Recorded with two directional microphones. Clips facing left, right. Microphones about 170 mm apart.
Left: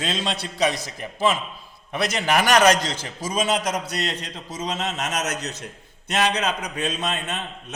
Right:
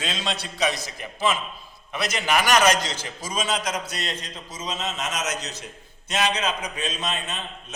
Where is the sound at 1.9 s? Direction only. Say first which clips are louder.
Left 2 dB; 60° left (ahead or behind).